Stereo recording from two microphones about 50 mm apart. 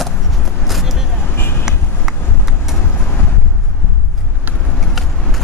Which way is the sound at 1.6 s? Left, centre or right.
Centre.